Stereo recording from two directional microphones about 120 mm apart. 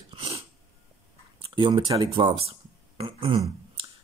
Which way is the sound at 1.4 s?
45° right (ahead or behind).